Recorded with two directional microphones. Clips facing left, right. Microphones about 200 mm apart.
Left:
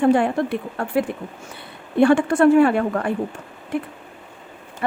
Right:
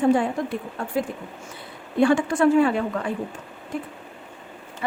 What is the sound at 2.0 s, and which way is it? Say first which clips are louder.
A woman's voice: left 4 dB; 60° left (ahead or behind).